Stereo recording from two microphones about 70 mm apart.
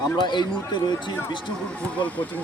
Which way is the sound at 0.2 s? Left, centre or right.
Left.